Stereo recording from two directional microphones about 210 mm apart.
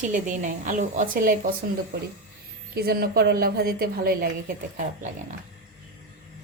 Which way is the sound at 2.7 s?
50° right (ahead or behind).